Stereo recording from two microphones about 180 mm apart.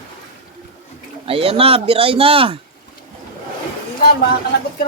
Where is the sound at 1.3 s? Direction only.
30° right (ahead or behind).